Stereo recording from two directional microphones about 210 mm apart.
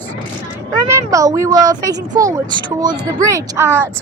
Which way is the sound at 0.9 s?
15° right (ahead or behind).